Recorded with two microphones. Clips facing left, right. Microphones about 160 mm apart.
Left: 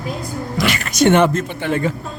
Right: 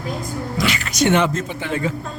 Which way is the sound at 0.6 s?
50° left (ahead or behind).